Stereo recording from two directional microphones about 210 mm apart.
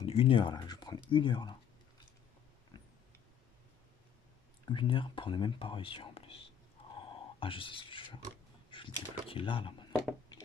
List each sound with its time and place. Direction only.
0.0 s speech: 25° left (ahead or behind)
4.6 s speech: 25° left (ahead or behind)